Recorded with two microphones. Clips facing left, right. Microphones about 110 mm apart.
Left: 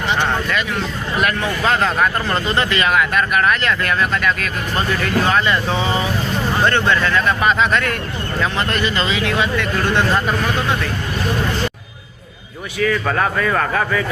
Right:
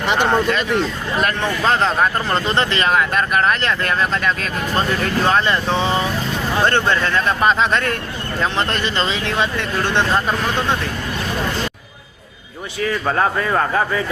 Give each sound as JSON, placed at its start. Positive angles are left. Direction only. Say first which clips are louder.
{"t": 1.6, "sound": "speech", "louder": "even", "side_deg": -25}
{"t": 12.8, "sound": "speech", "louder": "left 1 dB", "side_deg": -25}